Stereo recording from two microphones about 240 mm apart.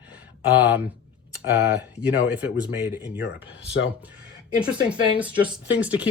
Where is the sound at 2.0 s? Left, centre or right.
Centre.